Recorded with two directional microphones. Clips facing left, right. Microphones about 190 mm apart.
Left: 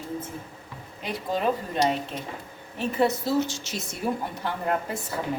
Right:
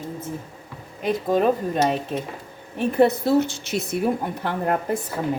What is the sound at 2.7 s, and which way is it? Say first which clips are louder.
A woman's voice: right 6 dB; 55° right (ahead or behind).